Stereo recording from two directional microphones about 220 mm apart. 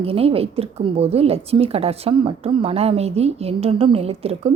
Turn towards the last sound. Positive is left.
turn(degrees=-25)  # may be behind; listen again after turning